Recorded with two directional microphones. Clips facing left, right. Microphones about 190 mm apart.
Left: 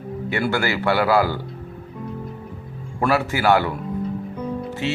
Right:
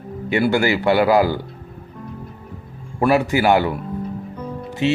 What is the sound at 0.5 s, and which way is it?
Speech, 15° right (ahead or behind).